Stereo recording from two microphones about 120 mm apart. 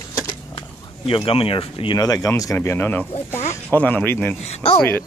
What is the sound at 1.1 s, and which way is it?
Speech, 50° left (ahead or behind).